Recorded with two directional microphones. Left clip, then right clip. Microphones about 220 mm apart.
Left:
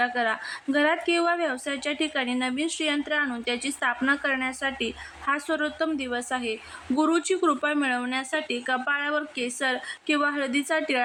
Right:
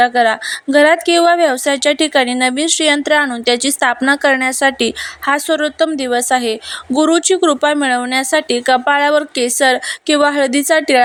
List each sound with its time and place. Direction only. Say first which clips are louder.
0.0 s speech: right 13 dB; 30° right (ahead or behind)